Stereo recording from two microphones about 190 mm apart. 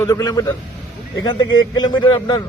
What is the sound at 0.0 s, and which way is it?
A man's voice, 20° left (ahead or behind).